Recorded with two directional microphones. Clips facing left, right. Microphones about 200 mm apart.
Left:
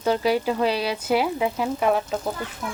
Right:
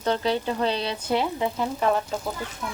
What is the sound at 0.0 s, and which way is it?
Speech, 10° left (ahead or behind).